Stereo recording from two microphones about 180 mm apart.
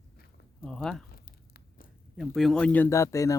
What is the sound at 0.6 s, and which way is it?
Speech, 5° left (ahead or behind).